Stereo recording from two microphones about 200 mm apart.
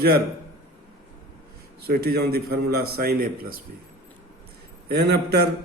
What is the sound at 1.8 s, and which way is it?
A man's voice, 50° right (ahead or behind).